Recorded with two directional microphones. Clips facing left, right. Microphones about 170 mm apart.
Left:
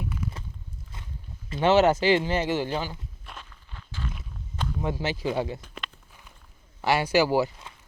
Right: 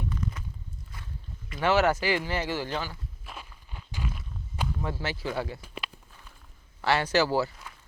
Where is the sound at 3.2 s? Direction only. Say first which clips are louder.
Right 2 dB; 10° right (ahead or behind).